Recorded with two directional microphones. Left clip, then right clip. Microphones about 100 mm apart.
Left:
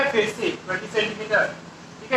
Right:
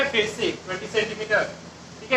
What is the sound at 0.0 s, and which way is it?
A man's voice, 30° left (ahead or behind).